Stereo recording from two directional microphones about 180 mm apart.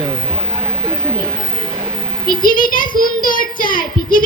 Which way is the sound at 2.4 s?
50° left (ahead or behind).